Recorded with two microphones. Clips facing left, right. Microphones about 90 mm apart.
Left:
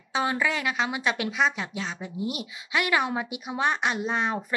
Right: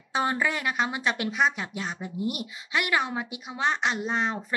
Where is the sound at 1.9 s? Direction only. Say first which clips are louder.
Right 1 dB; 15° right (ahead or behind).